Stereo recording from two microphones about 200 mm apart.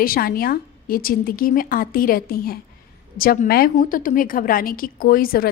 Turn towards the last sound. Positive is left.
turn(degrees=45)  # may be behind; listen again after turning